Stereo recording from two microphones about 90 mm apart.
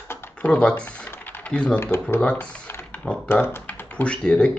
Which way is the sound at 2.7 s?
25° left (ahead or behind).